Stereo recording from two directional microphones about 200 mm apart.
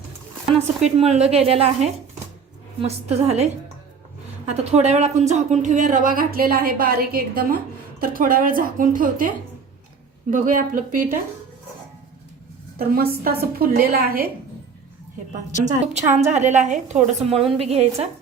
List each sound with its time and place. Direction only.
0.8 s a woman's voice: 35° right (ahead or behind)
10.3 s a woman's voice: 40° right (ahead or behind)
12.8 s speech: 50° right (ahead or behind)
15.6 s a woman's voice: 35° right (ahead or behind)